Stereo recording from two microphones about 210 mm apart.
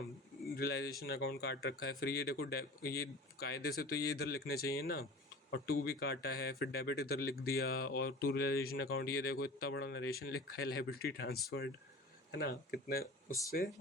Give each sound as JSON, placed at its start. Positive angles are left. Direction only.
{"t": 0.5, "sound": "speech", "side_deg": 50}